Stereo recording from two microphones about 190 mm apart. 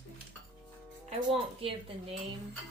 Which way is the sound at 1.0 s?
30° right (ahead or behind).